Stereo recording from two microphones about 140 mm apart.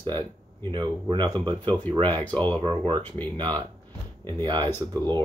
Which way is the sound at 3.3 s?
35° right (ahead or behind).